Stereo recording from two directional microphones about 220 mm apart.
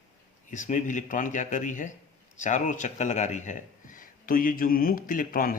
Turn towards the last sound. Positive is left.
turn(degrees=40)  # may be behind; listen again after turning